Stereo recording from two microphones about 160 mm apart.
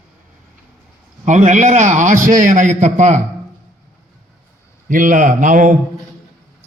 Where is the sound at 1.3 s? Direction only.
50° right (ahead or behind).